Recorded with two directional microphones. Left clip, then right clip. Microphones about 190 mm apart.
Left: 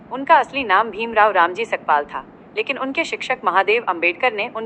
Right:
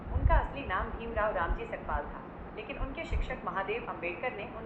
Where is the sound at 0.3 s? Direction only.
50° left (ahead or behind).